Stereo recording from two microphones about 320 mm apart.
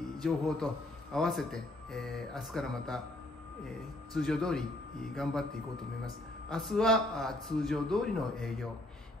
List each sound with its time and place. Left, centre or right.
0.2 s speech: centre
4.1 s speech: centre
6.5 s speech: centre